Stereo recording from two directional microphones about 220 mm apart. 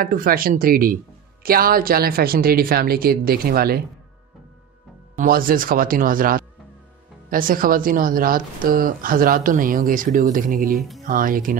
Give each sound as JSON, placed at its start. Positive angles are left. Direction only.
{"t": 0.0, "sound": "a woman's voice", "side_deg": -40}
{"t": 5.1, "sound": "speech", "side_deg": -40}
{"t": 10.6, "sound": "speech", "side_deg": 0}
{"t": 11.1, "sound": "speech", "side_deg": -40}